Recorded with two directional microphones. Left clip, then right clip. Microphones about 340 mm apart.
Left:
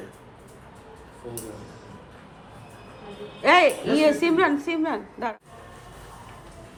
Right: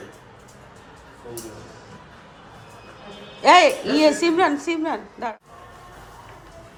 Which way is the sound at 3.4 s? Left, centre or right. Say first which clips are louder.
Right 4 dB; centre.